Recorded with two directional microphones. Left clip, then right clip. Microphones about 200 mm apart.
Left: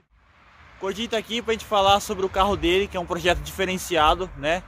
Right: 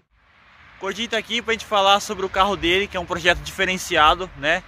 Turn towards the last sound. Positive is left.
turn(degrees=0)  # may be behind; listen again after turning